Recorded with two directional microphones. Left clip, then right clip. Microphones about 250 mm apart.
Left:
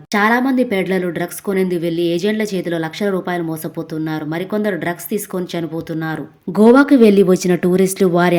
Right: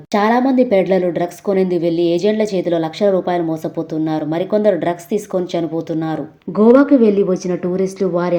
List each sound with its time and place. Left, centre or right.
0.1 s speech: left